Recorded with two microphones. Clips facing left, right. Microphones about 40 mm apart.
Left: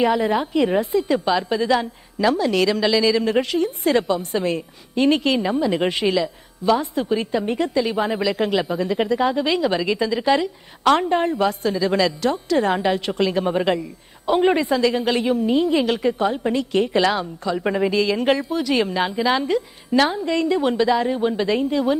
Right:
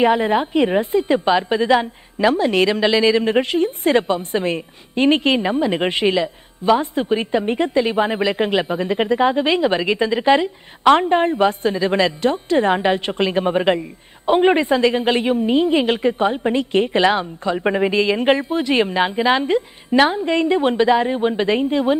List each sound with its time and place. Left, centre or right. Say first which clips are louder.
0.0 s a woman's voice: right 3 dB; right